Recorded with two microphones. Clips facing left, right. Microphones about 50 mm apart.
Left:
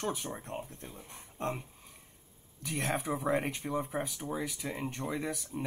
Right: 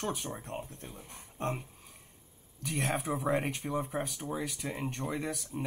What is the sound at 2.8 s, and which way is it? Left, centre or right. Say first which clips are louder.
Speech: even; right.